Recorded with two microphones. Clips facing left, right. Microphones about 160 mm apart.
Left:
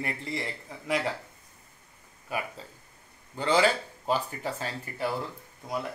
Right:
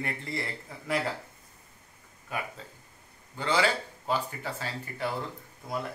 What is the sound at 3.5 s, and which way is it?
Speech, 15° left (ahead or behind).